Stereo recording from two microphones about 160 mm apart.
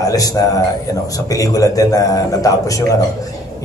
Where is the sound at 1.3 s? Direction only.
20° left (ahead or behind).